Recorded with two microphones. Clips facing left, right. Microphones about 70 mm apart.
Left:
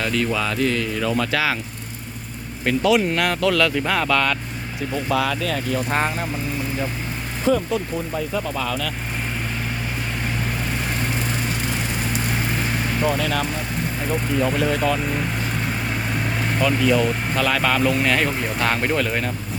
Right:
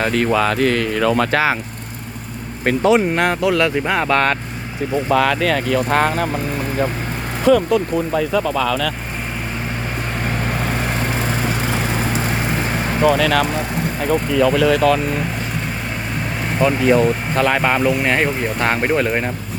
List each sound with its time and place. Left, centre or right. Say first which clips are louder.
0.0 s speech: right 6 dB; right
2.6 s speech: right 4 dB; right
5.1 s speech: right 6 dB; right
7.4 s speech: right 6 dB; right
13.0 s speech: right 8 dB; right
16.6 s speech: right 5 dB; right
17.6 s speech: right 3 dB; right